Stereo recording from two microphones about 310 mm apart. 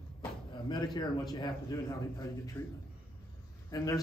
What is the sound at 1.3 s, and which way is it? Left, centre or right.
A man's voice, centre.